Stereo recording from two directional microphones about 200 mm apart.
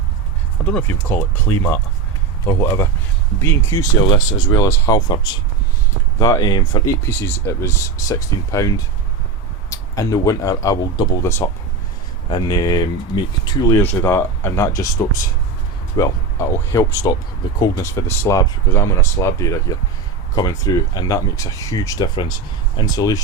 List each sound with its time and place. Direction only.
0.6 s speech: 5° left (ahead or behind)
12.3 s speech: 20° left (ahead or behind)
16.0 s speech: 15° left (ahead or behind)